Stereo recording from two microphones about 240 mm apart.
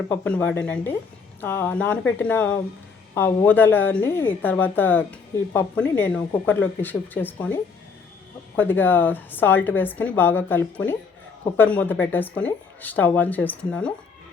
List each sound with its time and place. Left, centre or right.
0.1 s a woman's voice: centre